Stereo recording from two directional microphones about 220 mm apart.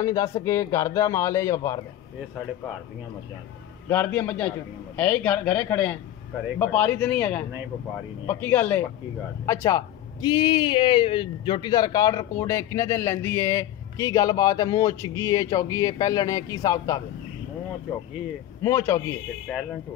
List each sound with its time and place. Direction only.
0.0 s speech: 15° left (ahead or behind)
3.9 s speech: 10° left (ahead or behind)
18.6 s speech: 10° left (ahead or behind)